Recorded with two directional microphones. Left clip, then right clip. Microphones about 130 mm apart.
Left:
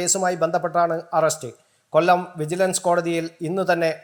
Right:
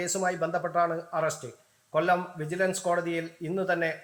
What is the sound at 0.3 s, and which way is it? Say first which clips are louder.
A man's voice: left 7 dB; 25° left (ahead or behind).